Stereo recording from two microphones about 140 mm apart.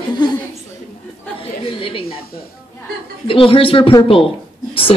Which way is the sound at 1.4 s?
40° left (ahead or behind).